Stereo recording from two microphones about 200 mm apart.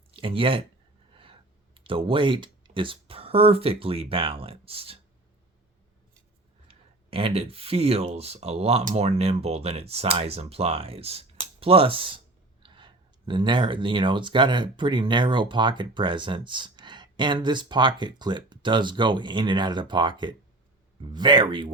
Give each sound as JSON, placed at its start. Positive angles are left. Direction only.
{"t": 0.1, "sound": "speech", "side_deg": -25}
{"t": 6.7, "sound": "speech", "side_deg": -30}